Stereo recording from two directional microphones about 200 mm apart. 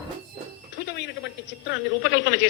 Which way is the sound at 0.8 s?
55° left (ahead or behind).